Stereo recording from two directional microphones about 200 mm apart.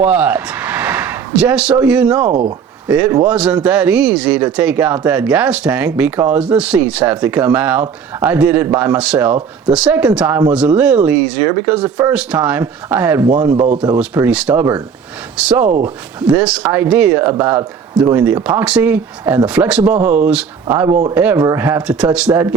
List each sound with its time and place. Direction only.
0.0 s speech: 5° right (ahead or behind)
19.2 s speech: 15° right (ahead or behind)
19.5 s speech: 5° right (ahead or behind)